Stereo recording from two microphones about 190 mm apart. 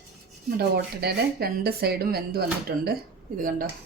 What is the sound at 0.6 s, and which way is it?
Speech, 55° right (ahead or behind).